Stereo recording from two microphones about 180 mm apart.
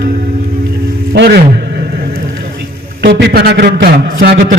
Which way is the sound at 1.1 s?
65° right (ahead or behind).